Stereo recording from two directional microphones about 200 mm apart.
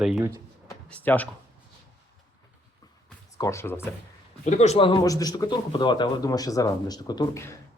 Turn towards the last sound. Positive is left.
turn(degrees=15)  # may be behind; listen again after turning